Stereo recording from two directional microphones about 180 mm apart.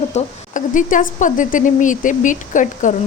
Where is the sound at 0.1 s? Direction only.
45° left (ahead or behind).